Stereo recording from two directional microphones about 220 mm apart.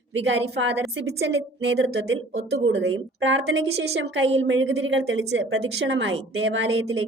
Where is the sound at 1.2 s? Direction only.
50° right (ahead or behind).